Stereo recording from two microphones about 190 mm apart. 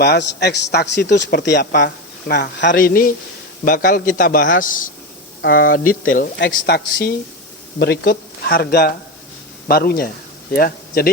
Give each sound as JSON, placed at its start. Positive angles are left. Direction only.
{"t": 0.0, "sound": "a man's voice", "side_deg": 60}
{"t": 2.7, "sound": "a man's voice", "side_deg": 50}